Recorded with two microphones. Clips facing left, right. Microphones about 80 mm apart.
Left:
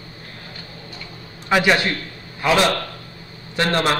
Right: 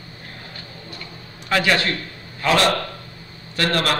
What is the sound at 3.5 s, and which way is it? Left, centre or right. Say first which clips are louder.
Speech: left 2 dB; left.